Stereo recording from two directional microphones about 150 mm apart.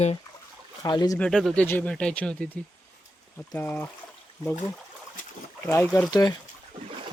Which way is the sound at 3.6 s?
15° left (ahead or behind).